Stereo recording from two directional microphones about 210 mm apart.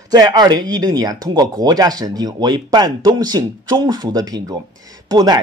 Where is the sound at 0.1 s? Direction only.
20° right (ahead or behind).